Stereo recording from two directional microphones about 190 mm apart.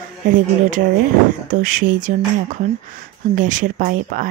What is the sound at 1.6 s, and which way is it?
A woman's voice, 45° right (ahead or behind).